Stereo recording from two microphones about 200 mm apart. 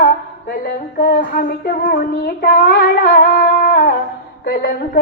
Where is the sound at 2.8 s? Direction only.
45° left (ahead or behind).